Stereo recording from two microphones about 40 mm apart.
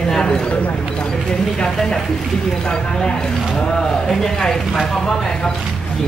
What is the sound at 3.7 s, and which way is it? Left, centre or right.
Speech, centre.